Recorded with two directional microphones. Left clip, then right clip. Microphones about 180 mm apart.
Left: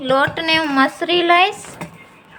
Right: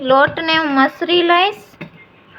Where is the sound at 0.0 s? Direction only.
Centre (ahead or behind).